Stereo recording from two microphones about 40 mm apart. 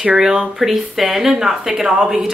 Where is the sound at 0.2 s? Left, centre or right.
Centre.